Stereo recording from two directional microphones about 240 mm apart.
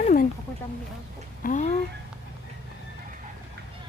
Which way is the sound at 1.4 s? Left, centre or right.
Left.